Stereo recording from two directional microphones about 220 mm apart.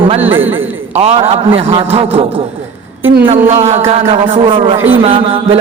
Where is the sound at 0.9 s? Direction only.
30° right (ahead or behind).